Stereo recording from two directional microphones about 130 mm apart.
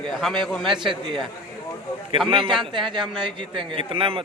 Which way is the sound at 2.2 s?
40° right (ahead or behind).